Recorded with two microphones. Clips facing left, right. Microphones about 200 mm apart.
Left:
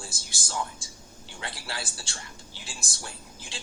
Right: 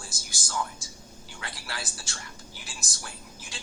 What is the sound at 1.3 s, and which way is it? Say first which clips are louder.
Speech: left 2 dB; 25° left (ahead or behind).